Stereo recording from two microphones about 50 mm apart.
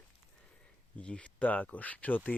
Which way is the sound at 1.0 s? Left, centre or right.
Left.